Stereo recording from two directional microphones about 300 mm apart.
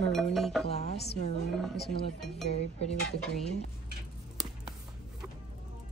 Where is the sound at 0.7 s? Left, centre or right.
Left.